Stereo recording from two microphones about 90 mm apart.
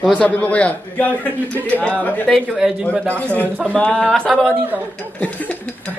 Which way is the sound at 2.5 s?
5° right (ahead or behind).